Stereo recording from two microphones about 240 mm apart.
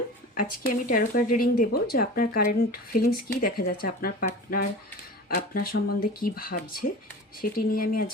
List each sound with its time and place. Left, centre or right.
0.3 s speech: left
5.3 s speech: left